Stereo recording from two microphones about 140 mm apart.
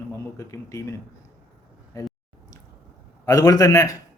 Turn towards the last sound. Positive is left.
turn(degrees=25)  # may be behind; listen again after turning